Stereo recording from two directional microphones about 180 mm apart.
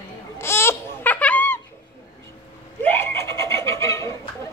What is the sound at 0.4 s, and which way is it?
Babbling, 15° left (ahead or behind).